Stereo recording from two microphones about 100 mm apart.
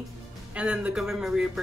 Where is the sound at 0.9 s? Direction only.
5° right (ahead or behind).